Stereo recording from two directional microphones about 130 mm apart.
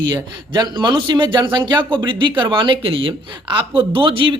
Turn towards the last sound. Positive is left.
turn(degrees=-40)  # may be behind; listen again after turning